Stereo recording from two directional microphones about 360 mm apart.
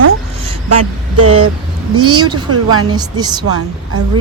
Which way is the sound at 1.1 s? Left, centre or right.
Right.